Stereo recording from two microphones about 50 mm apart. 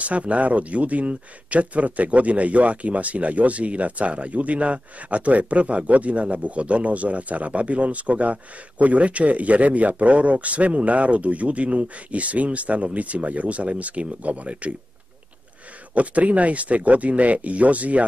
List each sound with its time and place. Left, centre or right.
0.0 s speech: right
15.9 s speech: right